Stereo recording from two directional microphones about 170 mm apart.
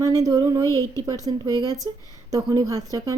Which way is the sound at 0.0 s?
20° right (ahead or behind).